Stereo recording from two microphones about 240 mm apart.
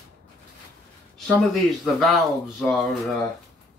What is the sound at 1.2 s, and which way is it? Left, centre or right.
Speech, centre.